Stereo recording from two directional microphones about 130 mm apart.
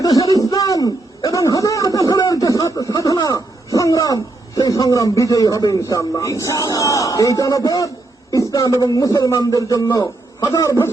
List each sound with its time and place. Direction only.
0.0 s a sound: 30° left (ahead or behind)
8.3 s a man's voice: 25° left (ahead or behind)
10.5 s a man's voice: 25° left (ahead or behind)